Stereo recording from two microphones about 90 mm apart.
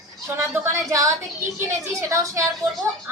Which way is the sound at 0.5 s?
25° right (ahead or behind).